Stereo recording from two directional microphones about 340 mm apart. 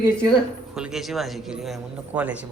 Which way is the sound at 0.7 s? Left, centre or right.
Centre.